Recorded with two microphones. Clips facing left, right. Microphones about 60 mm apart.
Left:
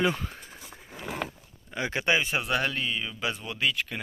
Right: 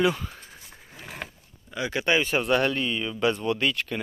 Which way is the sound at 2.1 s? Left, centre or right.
Centre.